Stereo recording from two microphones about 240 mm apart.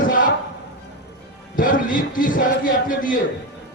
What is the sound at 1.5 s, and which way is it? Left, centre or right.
A man's voice, left.